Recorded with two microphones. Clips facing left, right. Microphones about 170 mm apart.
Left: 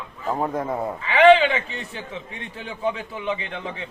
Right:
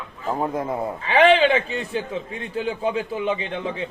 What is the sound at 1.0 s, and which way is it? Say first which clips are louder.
A man's voice: left 1 dB; 35° right (ahead or behind).